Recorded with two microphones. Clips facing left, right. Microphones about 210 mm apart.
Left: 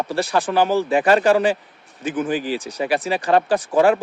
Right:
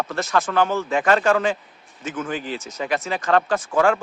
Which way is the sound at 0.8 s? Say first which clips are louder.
Left 3 dB; 15° left (ahead or behind).